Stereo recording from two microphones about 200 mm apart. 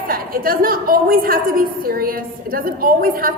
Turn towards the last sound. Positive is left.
turn(degrees=-45)  # may be behind; listen again after turning